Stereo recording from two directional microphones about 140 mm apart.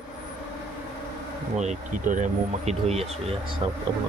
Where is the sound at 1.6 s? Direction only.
60° right (ahead or behind).